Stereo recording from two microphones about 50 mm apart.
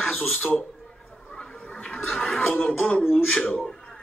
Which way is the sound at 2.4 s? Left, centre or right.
Left.